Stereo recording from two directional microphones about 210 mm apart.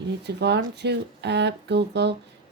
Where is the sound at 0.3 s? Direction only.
55° right (ahead or behind).